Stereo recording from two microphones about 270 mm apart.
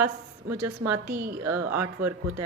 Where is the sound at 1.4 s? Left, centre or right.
Centre.